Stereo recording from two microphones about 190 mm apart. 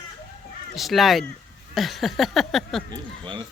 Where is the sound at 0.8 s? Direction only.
Centre (ahead or behind).